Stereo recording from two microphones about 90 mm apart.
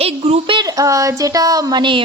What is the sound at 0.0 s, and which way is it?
Child singing, 80° right.